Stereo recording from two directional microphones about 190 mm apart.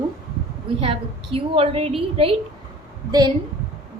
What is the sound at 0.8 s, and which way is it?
A woman's voice, 30° right (ahead or behind).